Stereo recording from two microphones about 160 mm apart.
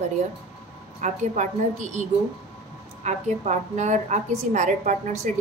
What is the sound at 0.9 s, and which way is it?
A woman's voice, 45° right (ahead or behind).